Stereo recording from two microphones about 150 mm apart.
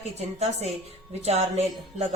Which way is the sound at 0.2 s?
45° right (ahead or behind).